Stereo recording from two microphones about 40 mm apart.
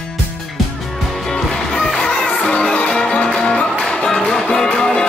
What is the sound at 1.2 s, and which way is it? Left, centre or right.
Music, centre.